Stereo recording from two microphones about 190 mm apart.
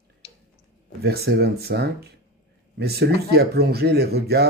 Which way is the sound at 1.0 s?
55° right (ahead or behind).